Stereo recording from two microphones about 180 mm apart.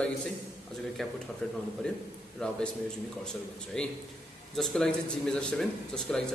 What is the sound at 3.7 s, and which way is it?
Speech, 5° left (ahead or behind).